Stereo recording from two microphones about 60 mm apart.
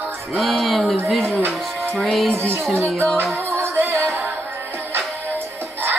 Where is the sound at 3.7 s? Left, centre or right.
Right.